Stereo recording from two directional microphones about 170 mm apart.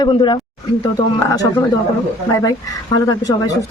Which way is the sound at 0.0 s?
25° left (ahead or behind).